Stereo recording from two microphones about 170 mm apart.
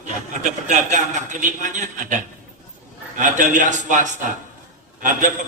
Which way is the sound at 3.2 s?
50° right (ahead or behind).